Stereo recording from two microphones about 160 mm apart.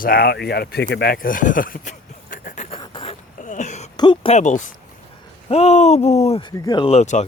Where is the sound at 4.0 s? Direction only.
30° left (ahead or behind).